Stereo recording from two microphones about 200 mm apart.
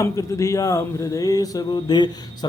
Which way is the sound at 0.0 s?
15° left (ahead or behind).